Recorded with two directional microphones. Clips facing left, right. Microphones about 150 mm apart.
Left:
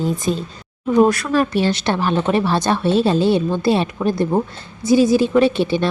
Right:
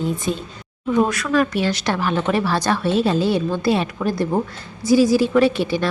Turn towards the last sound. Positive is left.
turn(degrees=25)  # may be behind; listen again after turning